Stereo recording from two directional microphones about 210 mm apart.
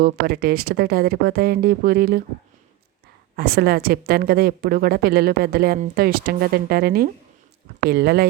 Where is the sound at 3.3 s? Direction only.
45° right (ahead or behind).